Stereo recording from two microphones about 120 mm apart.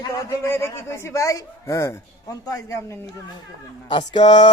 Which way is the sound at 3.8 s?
40° left (ahead or behind).